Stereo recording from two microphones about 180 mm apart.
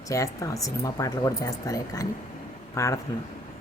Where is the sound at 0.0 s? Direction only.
15° left (ahead or behind).